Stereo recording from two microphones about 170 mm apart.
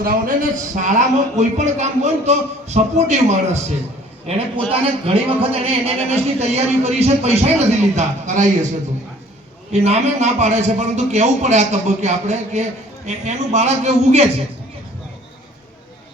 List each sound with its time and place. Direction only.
0.0 s a man's voice: 55° right (ahead or behind)
9.7 s a man's voice: 40° right (ahead or behind)